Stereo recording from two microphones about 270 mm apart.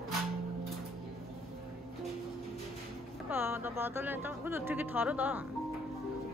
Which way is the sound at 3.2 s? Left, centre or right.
Centre.